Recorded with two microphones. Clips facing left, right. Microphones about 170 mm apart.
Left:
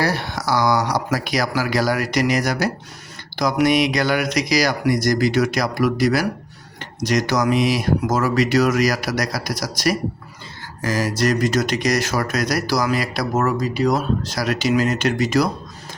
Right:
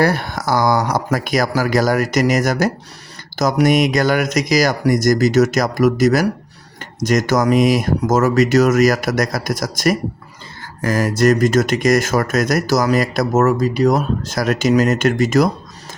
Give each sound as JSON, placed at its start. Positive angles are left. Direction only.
{"t": 0.0, "sound": "speech", "side_deg": -50}